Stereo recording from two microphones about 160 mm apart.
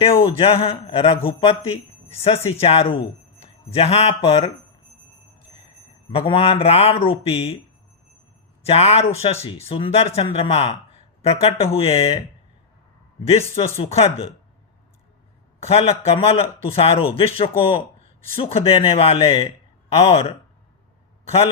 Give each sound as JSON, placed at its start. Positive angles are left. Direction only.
{"t": 0.2, "sound": "a man's voice", "side_deg": 35}
{"t": 6.1, "sound": "a man's voice", "side_deg": 35}
{"t": 8.6, "sound": "a man's voice", "side_deg": 40}
{"t": 13.8, "sound": "a man's voice", "side_deg": 40}
{"t": 15.6, "sound": "a man's voice", "side_deg": 40}